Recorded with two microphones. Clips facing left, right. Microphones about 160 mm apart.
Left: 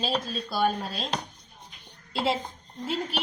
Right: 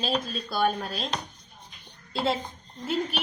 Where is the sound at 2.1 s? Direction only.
5° left (ahead or behind).